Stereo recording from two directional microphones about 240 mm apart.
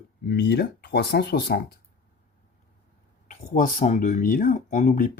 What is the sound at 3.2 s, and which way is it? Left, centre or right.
Speech, left.